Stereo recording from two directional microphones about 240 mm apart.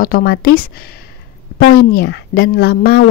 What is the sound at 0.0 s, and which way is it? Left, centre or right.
Speech, left.